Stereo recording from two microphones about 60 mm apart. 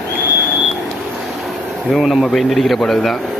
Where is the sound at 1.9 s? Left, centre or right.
Centre.